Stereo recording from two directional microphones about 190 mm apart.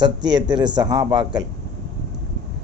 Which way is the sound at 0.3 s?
25° right (ahead or behind).